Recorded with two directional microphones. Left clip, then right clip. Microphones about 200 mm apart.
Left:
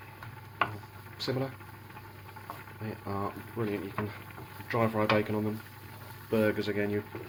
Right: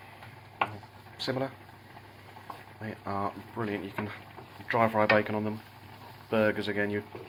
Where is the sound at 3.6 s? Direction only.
10° right (ahead or behind).